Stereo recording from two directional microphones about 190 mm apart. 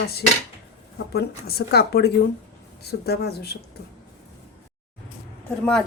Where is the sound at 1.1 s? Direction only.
55° left (ahead or behind).